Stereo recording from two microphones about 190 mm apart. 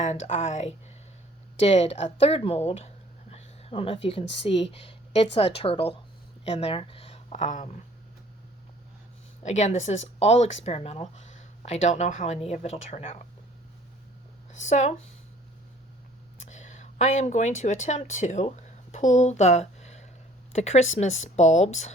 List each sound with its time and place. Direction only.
0.0 s speech: 35° left (ahead or behind)
9.4 s speech: 35° left (ahead or behind)
14.5 s speech: 40° left (ahead or behind)
16.4 s speech: 40° left (ahead or behind)